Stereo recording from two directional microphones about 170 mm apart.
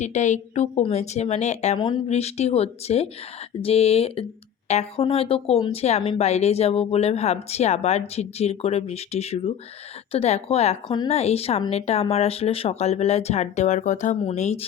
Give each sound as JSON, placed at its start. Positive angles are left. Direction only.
{"t": 0.0, "sound": "speech", "side_deg": 45}